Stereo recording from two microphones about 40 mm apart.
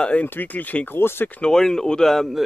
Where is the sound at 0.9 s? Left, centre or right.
Left.